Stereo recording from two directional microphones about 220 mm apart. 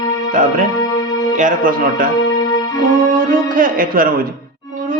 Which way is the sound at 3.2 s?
40° right (ahead or behind).